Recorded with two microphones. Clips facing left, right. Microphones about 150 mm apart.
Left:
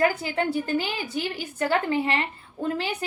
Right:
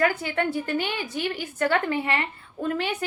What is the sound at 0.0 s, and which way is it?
A woman's voice, 25° left (ahead or behind).